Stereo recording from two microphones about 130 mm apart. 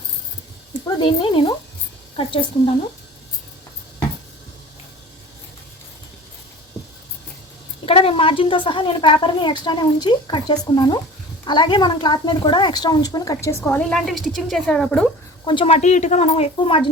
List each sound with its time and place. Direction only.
0.9 s a woman's voice: 35° left (ahead or behind)
7.9 s a woman's voice: 45° left (ahead or behind); by 13.8 s 20° left (ahead or behind)
13.9 s a woman's voice: centre (ahead or behind)
15.4 s a woman's voice: 45° left (ahead or behind)